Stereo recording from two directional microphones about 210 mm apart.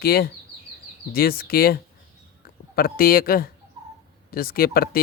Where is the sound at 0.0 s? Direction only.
45° left (ahead or behind).